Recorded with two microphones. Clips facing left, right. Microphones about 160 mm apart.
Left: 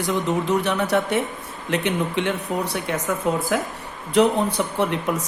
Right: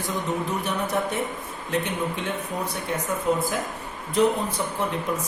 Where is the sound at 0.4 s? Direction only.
80° left.